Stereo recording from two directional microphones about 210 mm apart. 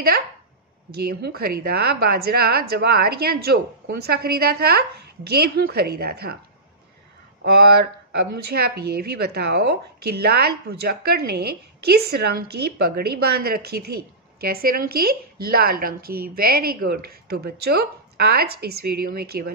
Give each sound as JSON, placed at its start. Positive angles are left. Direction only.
{"t": 1.0, "sound": "speech", "side_deg": -45}
{"t": 7.4, "sound": "speech", "side_deg": -50}